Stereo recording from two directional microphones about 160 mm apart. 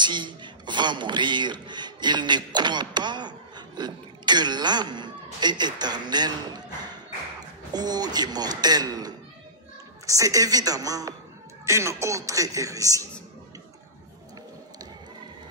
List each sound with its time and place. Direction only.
0.0 s speech: 30° right (ahead or behind)
7.7 s speech: 25° right (ahead or behind)